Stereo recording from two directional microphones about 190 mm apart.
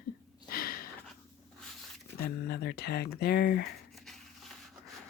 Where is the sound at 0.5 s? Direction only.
50° left (ahead or behind).